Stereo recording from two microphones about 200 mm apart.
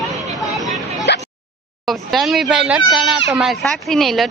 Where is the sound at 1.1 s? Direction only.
60° left (ahead or behind).